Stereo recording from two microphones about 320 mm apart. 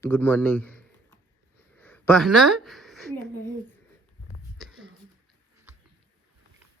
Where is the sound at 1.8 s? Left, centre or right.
Centre.